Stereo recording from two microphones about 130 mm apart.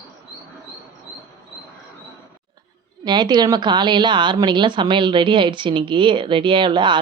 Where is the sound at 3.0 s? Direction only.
35° right (ahead or behind).